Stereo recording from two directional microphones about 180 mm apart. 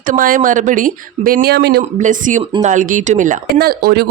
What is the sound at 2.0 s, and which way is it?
Speech, 45° right (ahead or behind).